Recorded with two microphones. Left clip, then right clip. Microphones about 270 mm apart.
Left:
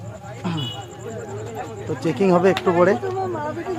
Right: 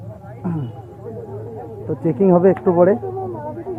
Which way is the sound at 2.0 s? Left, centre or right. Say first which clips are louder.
Right 3 dB; centre.